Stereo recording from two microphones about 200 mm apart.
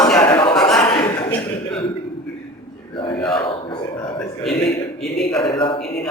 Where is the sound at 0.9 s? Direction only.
15° left (ahead or behind).